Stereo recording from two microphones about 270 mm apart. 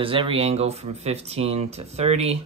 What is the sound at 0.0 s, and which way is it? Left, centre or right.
Speech, centre.